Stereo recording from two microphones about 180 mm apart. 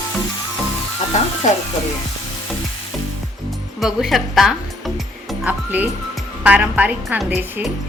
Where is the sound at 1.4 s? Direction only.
40° left (ahead or behind).